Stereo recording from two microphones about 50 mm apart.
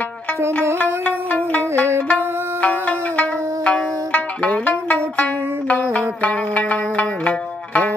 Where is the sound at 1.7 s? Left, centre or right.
Right.